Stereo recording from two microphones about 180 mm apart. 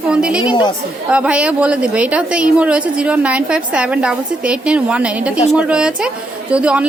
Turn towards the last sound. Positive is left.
turn(degrees=-5)  # may be behind; listen again after turning